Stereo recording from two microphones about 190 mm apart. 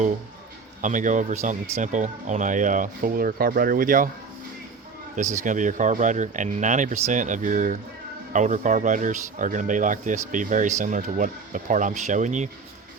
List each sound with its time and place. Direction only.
0.8 s speech: 40° right (ahead or behind)
5.1 s speech: 40° right (ahead or behind)